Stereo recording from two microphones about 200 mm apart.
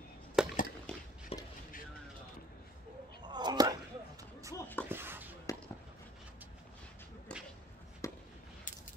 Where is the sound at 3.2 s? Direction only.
20° right (ahead or behind).